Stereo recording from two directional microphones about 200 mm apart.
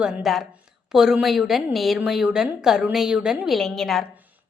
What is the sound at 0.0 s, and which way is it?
A woman's voice, centre (ahead or behind).